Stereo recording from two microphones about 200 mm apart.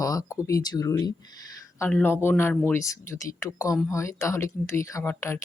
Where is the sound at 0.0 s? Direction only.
15° left (ahead or behind).